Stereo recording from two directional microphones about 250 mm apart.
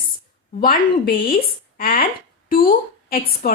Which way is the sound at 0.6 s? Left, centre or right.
Left.